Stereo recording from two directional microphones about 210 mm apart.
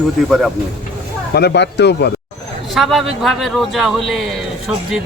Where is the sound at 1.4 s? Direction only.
50° left (ahead or behind).